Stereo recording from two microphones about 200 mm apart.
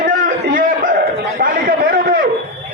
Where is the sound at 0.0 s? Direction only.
45° right (ahead or behind).